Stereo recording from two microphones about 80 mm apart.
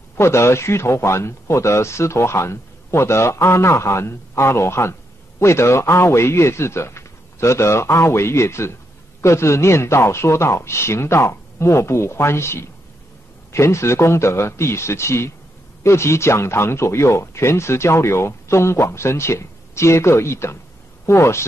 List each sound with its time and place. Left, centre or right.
0.2 s speech: left